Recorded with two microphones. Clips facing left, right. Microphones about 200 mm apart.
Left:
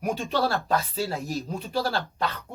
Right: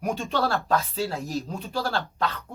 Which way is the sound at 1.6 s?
10° left (ahead or behind).